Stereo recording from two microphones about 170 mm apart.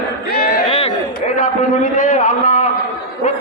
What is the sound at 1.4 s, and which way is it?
A man's voice, 55° left (ahead or behind).